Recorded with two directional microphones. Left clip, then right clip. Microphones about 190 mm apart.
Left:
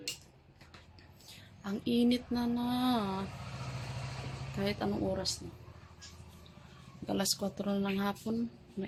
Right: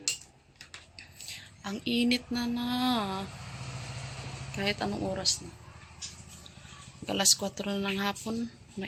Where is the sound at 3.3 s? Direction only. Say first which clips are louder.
Right 1 dB; centre (ahead or behind).